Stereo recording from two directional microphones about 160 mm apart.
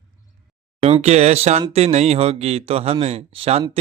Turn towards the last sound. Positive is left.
turn(degrees=-40)  # may be behind; listen again after turning